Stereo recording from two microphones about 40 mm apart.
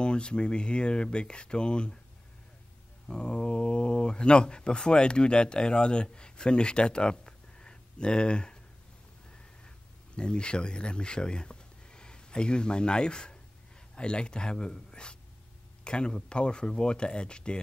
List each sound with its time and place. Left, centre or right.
0.0 s speech: left
3.1 s speech: left
10.1 s speech: left